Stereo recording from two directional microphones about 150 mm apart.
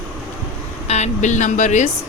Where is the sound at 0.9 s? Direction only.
50° left (ahead or behind).